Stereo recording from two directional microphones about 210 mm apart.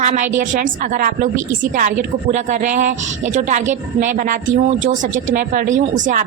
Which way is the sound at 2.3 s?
35° right (ahead or behind).